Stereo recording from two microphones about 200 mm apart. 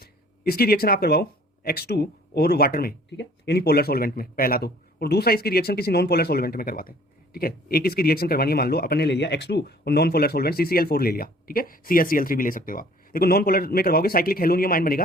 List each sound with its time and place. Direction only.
0.0 s a man's voice: 50° left (ahead or behind)